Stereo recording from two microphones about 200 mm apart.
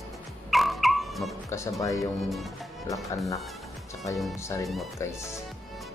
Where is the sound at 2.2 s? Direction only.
Centre (ahead or behind).